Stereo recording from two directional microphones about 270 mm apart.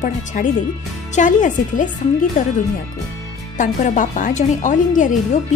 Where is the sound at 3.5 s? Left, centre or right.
Left.